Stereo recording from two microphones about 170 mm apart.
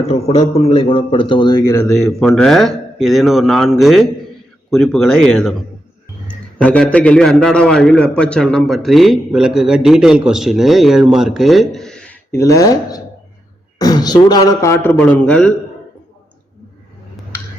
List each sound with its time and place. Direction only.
0.0 s a man's voice: 40° left (ahead or behind)
1.7 s a man's voice: 5° left (ahead or behind)
12.3 s a man's voice: 20° left (ahead or behind)